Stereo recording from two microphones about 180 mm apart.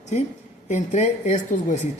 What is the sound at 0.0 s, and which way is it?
A woman's voice, 40° left (ahead or behind).